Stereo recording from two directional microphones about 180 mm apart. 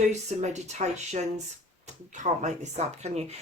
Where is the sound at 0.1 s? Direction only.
40° right (ahead or behind).